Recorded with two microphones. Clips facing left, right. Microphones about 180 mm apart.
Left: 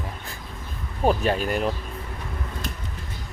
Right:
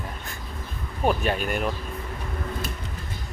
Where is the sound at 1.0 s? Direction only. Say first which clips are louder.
Left 2 dB; 35° left (ahead or behind).